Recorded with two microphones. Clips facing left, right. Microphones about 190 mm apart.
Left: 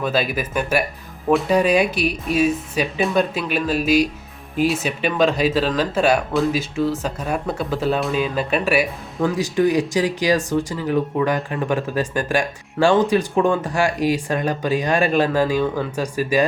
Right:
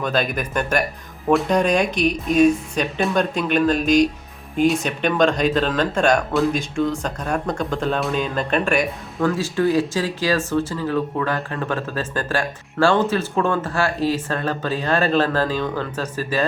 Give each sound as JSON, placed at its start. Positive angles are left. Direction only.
{"t": 0.0, "sound": "speech", "side_deg": 5}